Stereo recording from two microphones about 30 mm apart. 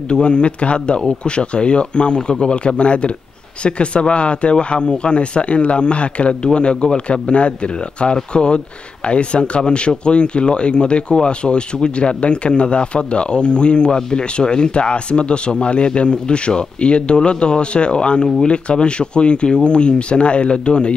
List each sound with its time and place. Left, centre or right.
0.1 s speech: left